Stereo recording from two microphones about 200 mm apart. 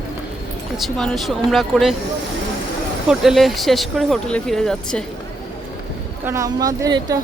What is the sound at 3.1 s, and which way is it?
Speech, centre (ahead or behind).